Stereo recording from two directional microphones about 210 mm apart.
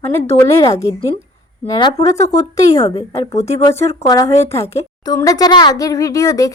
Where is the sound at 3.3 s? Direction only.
30° left (ahead or behind).